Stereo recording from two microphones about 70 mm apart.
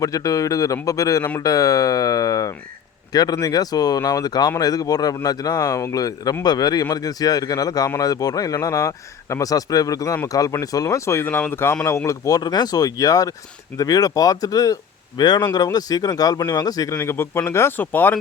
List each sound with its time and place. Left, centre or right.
0.0 s speech: left
3.1 s speech: left
6.4 s speech: left
11.9 s speech: left
12.4 s speech: left
15.2 s a man's voice: left
15.5 s speech: left
16.9 s speech: left